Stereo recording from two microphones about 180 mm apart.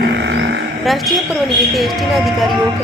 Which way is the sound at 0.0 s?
80° right.